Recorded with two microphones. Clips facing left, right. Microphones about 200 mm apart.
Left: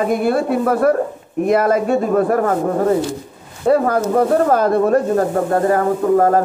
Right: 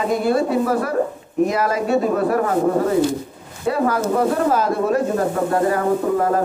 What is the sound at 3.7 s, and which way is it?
Speech, 50° left (ahead or behind).